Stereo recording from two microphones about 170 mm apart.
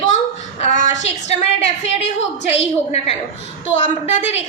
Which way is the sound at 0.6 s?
45° left (ahead or behind).